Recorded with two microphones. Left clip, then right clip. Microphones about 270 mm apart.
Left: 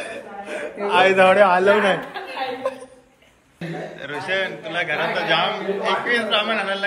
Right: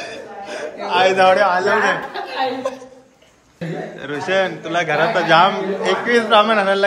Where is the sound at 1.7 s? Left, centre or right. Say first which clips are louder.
Even; left.